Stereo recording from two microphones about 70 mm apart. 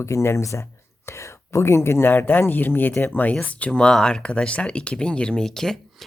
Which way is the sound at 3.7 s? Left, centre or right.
Centre.